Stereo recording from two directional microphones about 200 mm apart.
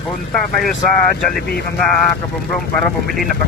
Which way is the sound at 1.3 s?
50° left (ahead or behind).